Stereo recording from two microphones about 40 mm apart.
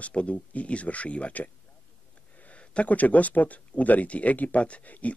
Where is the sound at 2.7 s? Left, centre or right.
Left.